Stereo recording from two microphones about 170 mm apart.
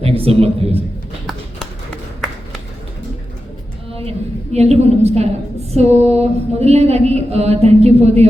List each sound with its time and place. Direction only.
0.0 s a man's voice: 35° right (ahead or behind)
4.5 s a woman's voice: 40° right (ahead or behind)